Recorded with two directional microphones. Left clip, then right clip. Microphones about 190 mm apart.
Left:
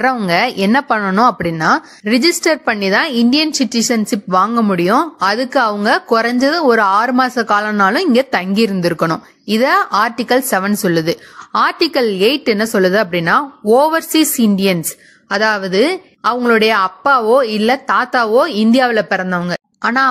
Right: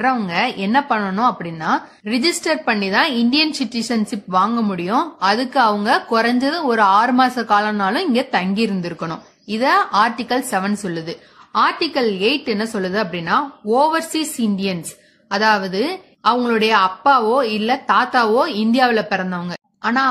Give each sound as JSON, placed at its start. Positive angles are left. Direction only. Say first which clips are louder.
{"t": 0.0, "sound": "a woman's voice", "louder": "left 4 dB", "side_deg": 50}